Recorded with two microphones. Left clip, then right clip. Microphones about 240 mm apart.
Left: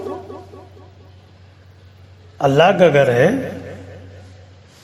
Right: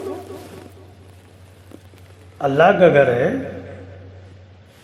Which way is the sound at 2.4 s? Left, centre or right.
Left.